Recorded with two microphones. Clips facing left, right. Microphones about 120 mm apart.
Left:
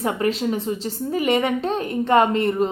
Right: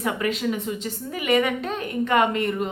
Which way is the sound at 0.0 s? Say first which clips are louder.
Left 3 dB; 30° left (ahead or behind).